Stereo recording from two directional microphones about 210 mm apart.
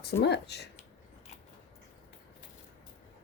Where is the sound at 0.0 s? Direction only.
55° left (ahead or behind).